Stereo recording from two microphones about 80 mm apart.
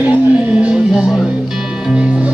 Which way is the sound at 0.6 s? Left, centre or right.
Centre.